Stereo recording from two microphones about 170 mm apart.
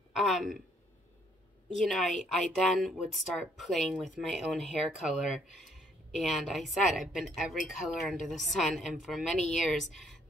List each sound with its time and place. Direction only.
0.1 s a woman's voice: centre (ahead or behind)
1.9 s speech: centre (ahead or behind)